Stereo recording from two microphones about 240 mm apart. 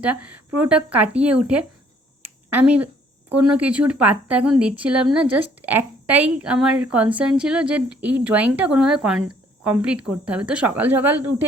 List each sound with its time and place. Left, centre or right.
0.0 s a woman's voice: centre
2.5 s a sound: centre
3.5 s a woman's voice: centre